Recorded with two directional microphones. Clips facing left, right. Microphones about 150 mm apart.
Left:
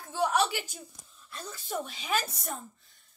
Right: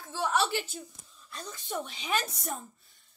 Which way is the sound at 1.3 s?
5° left (ahead or behind).